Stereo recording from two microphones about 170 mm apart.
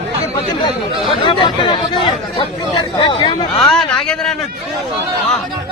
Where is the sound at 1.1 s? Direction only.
30° left (ahead or behind).